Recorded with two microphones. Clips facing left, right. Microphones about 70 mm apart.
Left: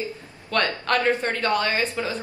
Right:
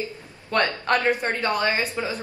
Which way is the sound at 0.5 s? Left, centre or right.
Right.